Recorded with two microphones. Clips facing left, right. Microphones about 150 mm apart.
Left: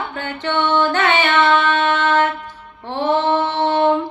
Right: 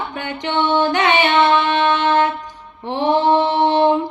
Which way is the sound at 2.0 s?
15° right (ahead or behind).